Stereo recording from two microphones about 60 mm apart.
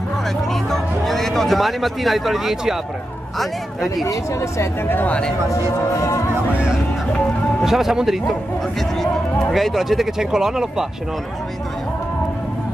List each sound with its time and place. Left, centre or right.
0.5 s speech: centre
4.0 s speech: left
4.8 s speech: left
7.6 s speech: centre
9.5 s speech: centre